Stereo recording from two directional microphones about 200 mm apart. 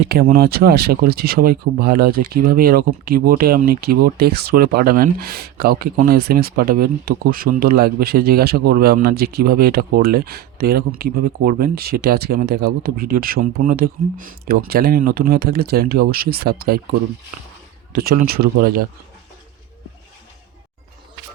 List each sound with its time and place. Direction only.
0.1 s speech: 50° right (ahead or behind)
17.9 s speech: 45° right (ahead or behind)